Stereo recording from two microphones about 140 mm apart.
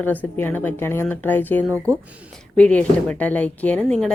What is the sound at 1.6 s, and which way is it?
Speech, 20° right (ahead or behind).